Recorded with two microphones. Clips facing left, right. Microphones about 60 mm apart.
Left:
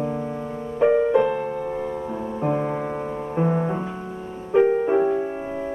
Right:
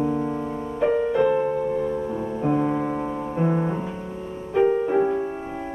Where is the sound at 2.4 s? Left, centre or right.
Centre.